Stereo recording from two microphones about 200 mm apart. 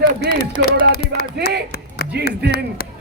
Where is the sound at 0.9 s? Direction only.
50° left (ahead or behind).